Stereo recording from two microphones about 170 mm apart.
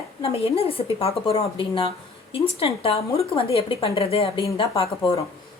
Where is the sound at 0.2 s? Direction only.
35° left (ahead or behind).